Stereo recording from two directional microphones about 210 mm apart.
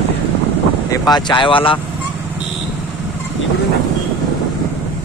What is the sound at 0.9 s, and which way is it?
Speech, 20° left (ahead or behind).